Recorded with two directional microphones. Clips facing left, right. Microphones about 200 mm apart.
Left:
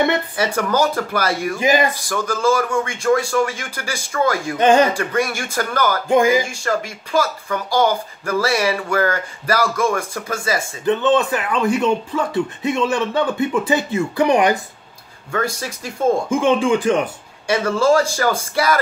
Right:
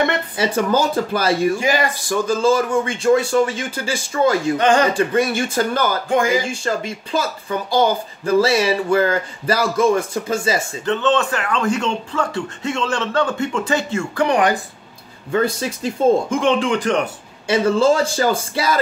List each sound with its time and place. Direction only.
0.4 s speech: 25° right (ahead or behind)
1.6 s speech: 15° left (ahead or behind)
2.0 s speech: 20° right (ahead or behind)
4.6 s speech: 15° left (ahead or behind)
4.9 s speech: 25° right (ahead or behind)
6.0 s speech: 15° left (ahead or behind)
6.6 s speech: 25° right (ahead or behind)
10.9 s speech: 15° left (ahead or behind)
15.3 s speech: 25° right (ahead or behind)
16.3 s speech: 15° left (ahead or behind)
17.5 s speech: 25° right (ahead or behind)